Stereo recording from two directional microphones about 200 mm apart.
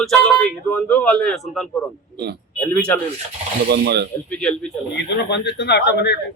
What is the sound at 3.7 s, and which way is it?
Speech, 55° right (ahead or behind).